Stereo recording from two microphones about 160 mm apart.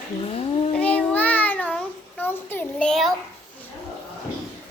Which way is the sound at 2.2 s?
15° left (ahead or behind).